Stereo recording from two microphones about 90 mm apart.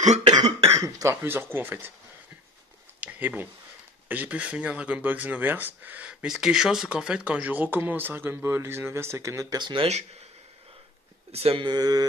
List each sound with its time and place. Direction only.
0.4 s cough: 40° right (ahead or behind)
1.2 s speech: 25° right (ahead or behind)
3.0 s a sound: 20° right (ahead or behind)
4.1 s speech: 15° right (ahead or behind); by 9.6 s 35° right (ahead or behind)
9.6 s speech: 60° right (ahead or behind)
11.3 s speech: 85° right
11.7 s mantra: 45° right (ahead or behind)